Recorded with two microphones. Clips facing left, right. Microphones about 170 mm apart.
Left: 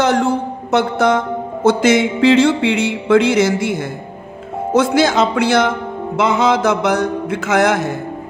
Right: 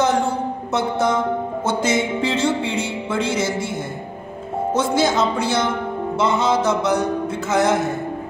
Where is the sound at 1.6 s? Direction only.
85° left.